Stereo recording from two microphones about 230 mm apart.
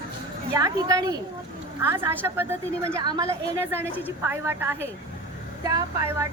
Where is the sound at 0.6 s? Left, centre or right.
Centre.